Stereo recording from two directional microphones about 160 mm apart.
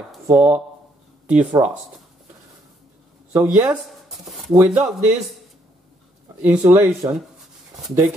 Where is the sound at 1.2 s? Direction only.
10° right (ahead or behind).